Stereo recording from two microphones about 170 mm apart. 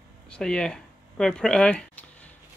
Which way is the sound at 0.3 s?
5° left (ahead or behind).